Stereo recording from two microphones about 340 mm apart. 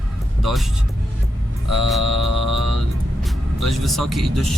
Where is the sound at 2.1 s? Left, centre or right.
Left.